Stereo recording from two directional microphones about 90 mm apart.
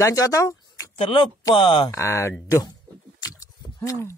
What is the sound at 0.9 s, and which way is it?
Speech, 80° left.